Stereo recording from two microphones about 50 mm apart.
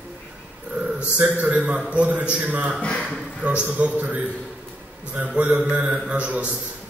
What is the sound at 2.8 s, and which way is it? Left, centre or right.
Speech, left.